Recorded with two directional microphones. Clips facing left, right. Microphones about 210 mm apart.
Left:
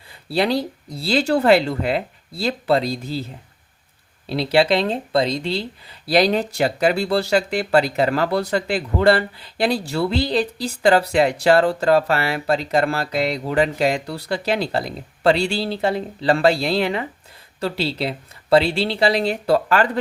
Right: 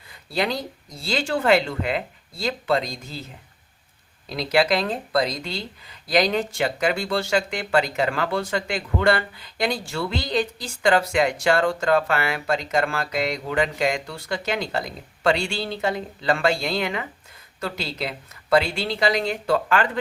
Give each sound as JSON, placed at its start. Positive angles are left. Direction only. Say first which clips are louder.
{"t": 0.1, "sound": "speech", "louder": "left 5 dB", "side_deg": 35}
{"t": 4.3, "sound": "speech", "louder": "left 4 dB", "side_deg": 30}